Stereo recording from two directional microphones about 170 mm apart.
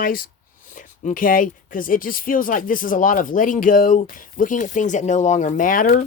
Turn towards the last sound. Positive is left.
turn(degrees=55)  # may be behind; listen again after turning